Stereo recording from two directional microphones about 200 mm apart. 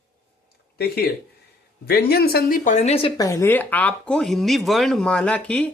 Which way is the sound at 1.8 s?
50° left (ahead or behind).